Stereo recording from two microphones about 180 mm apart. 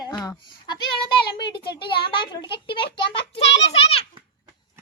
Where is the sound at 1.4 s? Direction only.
25° left (ahead or behind).